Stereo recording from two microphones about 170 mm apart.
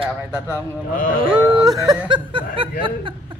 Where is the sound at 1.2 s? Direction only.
25° right (ahead or behind).